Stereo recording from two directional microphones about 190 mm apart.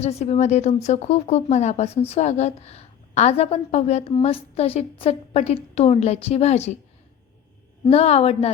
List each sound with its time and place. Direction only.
0.0 s speech: 35° left (ahead or behind)
7.9 s speech: 30° left (ahead or behind)